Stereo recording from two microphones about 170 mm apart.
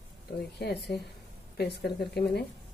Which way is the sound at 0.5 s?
75° left (ahead or behind).